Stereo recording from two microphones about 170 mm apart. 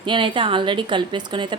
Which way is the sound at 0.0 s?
30° right (ahead or behind).